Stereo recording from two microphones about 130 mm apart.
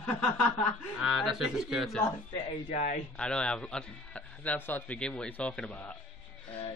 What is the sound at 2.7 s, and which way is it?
Speech, 90° left.